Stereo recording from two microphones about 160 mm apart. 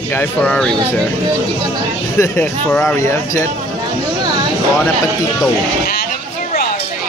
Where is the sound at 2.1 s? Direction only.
15° left (ahead or behind).